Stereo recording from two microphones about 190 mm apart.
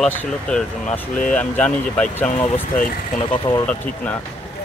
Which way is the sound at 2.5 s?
45° left (ahead or behind).